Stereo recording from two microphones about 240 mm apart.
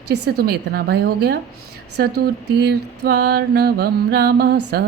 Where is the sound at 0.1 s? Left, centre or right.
Right.